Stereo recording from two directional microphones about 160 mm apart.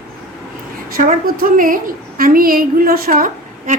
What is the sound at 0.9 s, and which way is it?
A woman's voice, 65° right (ahead or behind).